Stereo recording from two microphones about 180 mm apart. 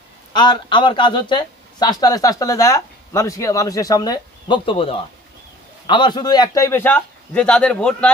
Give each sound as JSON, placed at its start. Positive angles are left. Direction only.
{"t": 0.3, "sound": "a man's voice", "side_deg": 25}